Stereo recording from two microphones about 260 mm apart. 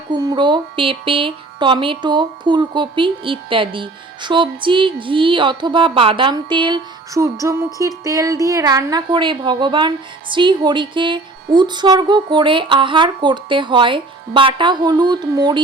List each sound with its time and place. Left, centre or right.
0.1 s music: centre